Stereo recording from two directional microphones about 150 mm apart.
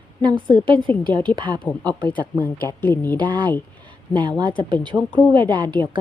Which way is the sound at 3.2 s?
30° right (ahead or behind).